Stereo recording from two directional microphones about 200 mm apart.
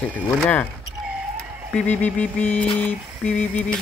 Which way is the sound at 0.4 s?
5° left (ahead or behind).